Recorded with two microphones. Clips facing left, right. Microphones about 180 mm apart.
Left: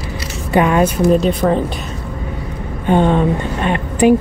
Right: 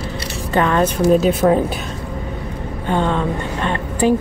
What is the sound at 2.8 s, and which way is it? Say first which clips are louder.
Speech: left 6 dB; 15° left (ahead or behind).